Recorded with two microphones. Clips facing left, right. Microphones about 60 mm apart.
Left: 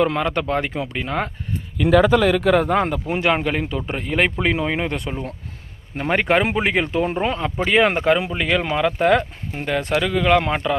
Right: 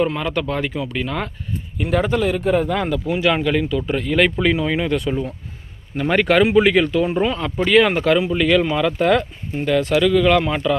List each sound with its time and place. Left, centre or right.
0.2 s speech: left
0.9 s speech: left
2.4 s a man's voice: left
2.6 s speech: left
6.0 s speech: left
7.0 s speech: left